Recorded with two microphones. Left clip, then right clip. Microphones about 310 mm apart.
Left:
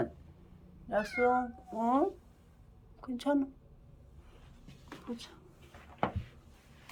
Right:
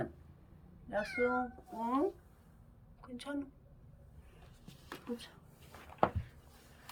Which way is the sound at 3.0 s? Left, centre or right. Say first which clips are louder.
Left 12 dB; centre.